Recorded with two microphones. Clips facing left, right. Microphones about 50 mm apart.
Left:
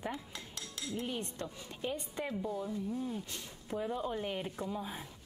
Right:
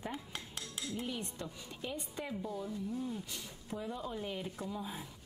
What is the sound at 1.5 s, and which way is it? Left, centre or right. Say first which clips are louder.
Speech: left 4 dB; left.